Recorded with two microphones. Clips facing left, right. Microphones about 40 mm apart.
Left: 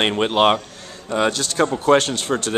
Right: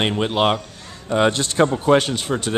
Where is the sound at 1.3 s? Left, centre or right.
Right.